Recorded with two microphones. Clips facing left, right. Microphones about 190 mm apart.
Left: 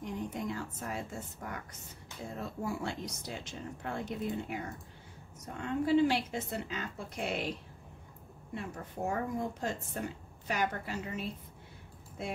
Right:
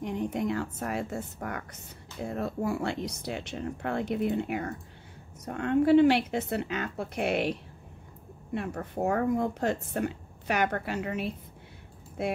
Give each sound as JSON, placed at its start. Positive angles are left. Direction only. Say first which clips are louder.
{"t": 0.0, "sound": "speech", "louder": "right 7 dB", "side_deg": -65}
{"t": 8.5, "sound": "speech", "louder": "right 7 dB", "side_deg": -65}